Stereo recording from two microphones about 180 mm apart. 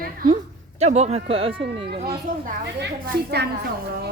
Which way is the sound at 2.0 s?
65° right (ahead or behind).